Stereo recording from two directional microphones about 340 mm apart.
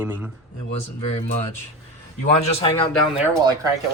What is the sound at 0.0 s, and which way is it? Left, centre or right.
Speech, centre.